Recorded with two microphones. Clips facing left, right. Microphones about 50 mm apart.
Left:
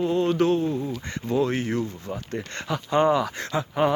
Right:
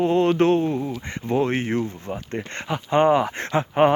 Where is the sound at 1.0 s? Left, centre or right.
Right.